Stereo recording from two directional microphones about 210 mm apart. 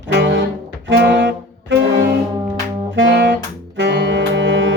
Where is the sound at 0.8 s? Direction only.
55° right (ahead or behind).